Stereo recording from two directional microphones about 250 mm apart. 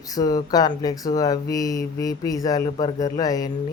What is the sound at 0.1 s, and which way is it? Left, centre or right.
Speech, centre.